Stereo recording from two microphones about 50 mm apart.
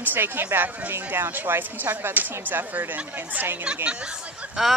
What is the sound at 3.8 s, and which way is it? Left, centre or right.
Speech, right.